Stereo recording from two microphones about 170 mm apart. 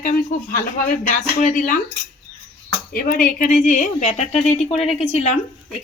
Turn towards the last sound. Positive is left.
turn(degrees=40)  # may be behind; listen again after turning